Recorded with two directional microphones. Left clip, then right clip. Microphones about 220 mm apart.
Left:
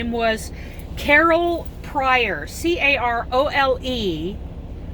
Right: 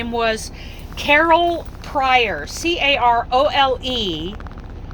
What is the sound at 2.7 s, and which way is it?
Speech, 55° right (ahead or behind).